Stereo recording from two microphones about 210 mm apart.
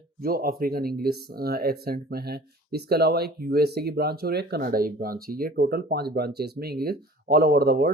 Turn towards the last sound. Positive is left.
turn(degrees=-45)  # may be behind; listen again after turning